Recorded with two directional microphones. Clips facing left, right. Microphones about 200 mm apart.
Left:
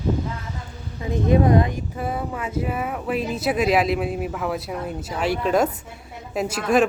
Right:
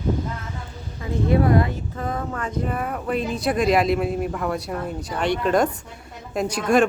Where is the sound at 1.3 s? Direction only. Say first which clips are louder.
Left 1 dB; 20° left (ahead or behind).